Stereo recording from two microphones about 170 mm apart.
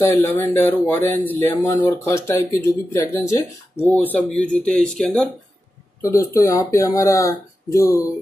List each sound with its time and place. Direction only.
0.0 s speech: 15° left (ahead or behind)
6.0 s speech: 15° left (ahead or behind)